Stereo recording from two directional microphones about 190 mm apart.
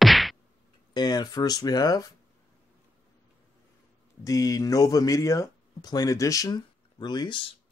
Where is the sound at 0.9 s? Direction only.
20° left (ahead or behind).